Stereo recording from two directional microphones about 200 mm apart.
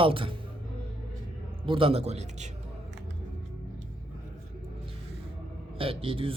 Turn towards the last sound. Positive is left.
turn(degrees=-25)  # may be behind; listen again after turning